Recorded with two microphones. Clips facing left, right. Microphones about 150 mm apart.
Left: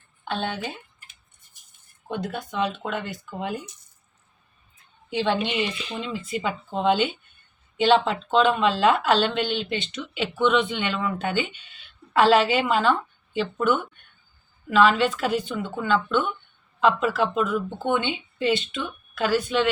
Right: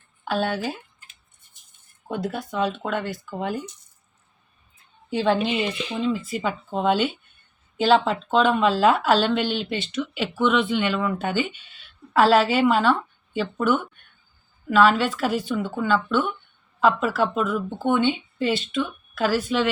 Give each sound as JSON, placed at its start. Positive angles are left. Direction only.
{"t": 0.3, "sound": "speech", "side_deg": -5}
{"t": 2.0, "sound": "speech", "side_deg": -5}
{"t": 5.0, "sound": "speech", "side_deg": 0}